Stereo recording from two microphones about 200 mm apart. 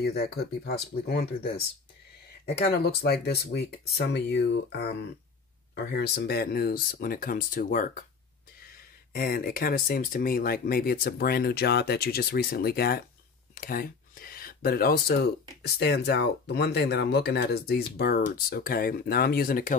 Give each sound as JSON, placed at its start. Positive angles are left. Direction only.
{"t": 0.0, "sound": "speech", "side_deg": 50}
{"t": 2.7, "sound": "speech", "side_deg": 55}
{"t": 5.9, "sound": "speech", "side_deg": 50}
{"t": 9.1, "sound": "speech", "side_deg": 50}